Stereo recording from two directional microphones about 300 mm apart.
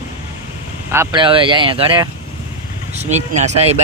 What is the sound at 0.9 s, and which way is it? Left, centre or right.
Speech, centre.